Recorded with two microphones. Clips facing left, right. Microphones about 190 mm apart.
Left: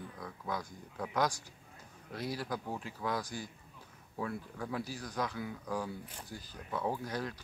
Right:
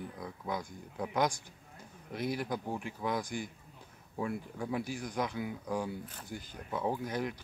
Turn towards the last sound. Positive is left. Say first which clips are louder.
# right 2 dB
turn(degrees=-20)  # may be behind; listen again after turning